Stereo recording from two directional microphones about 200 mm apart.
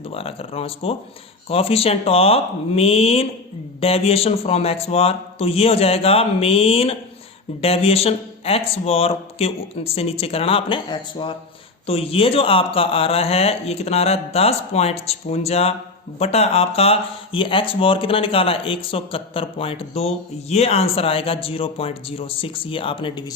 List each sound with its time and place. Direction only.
0.1 s speech: 30° left (ahead or behind)